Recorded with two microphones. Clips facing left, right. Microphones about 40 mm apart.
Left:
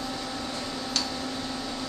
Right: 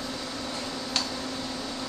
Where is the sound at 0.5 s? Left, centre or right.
Centre.